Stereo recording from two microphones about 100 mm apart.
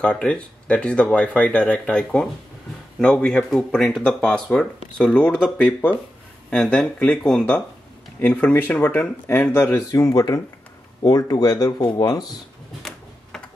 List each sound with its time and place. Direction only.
0.0 s speech: 10° left (ahead or behind); by 12.3 s 40° left (ahead or behind)